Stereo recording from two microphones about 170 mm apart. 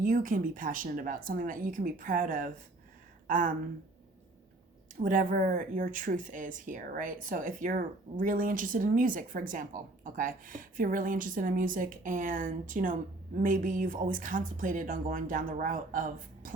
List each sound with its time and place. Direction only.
0.0 s speech: 50° right (ahead or behind)
4.9 s speech: 50° right (ahead or behind)